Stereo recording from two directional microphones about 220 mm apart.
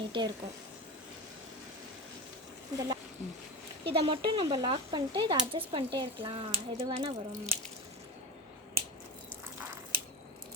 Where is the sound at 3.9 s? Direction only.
20° right (ahead or behind).